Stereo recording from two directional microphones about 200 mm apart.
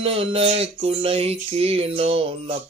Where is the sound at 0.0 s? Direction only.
30° right (ahead or behind).